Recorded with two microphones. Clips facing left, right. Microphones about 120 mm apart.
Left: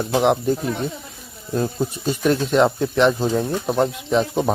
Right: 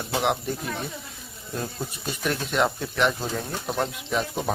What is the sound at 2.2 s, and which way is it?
Speech, 30° left (ahead or behind).